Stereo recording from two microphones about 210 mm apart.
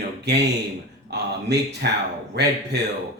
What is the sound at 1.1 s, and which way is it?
Speech, 50° right (ahead or behind).